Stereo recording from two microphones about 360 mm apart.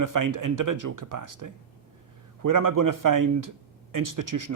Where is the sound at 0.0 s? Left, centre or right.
Right.